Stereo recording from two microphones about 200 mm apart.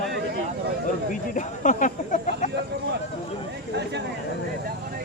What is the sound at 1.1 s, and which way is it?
Speech, 40° left (ahead or behind).